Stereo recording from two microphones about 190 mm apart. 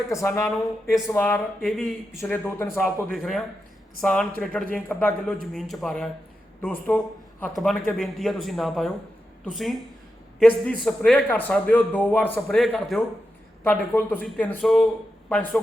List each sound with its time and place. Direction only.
0.1 s speech: 15° left (ahead or behind)
3.2 s a man's voice: centre (ahead or behind)